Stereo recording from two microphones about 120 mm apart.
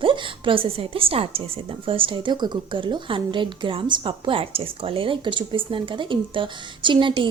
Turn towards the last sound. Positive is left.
turn(degrees=-45)  # may be behind; listen again after turning